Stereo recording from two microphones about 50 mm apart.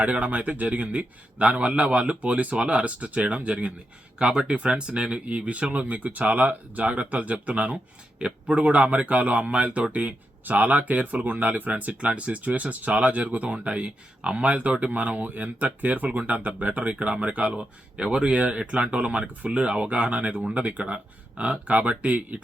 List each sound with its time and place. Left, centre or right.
0.0 s a man's voice: right